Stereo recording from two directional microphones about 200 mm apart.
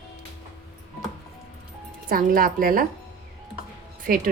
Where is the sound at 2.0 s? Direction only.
45° right (ahead or behind).